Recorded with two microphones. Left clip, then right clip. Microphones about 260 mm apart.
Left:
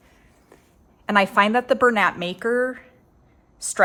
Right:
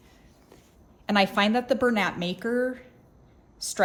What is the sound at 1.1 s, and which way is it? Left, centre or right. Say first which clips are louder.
A woman's voice: left 5 dB; centre.